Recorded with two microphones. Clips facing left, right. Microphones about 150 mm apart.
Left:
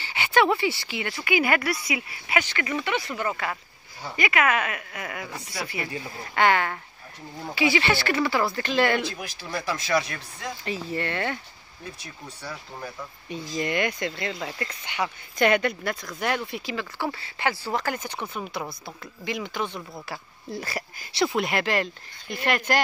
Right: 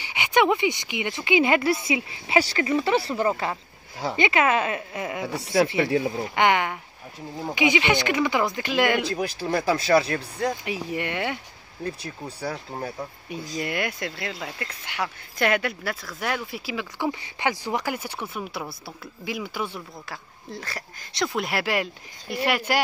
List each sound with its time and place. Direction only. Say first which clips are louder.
0.0 s speech: right 1 dB; 15° right (ahead or behind)
5.8 s speech: right 11 dB; 90° right
6.3 s speech: left 1 dB; 15° right (ahead or behind)
9.1 s speech: right 9 dB; 50° right (ahead or behind)
9.8 s speech: right 5 dB; 30° right (ahead or behind)
10.6 s speech: right 1 dB; 15° right (ahead or behind)
12.7 s speech: right 5 dB; 40° right (ahead or behind)
13.3 s speech: left 3 dB; 5° right (ahead or behind)
20.1 s speech: left 2 dB; 10° left (ahead or behind); by 22.8 s 10° right (ahead or behind)